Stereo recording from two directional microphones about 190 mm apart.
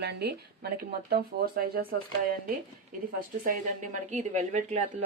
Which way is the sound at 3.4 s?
45° right (ahead or behind).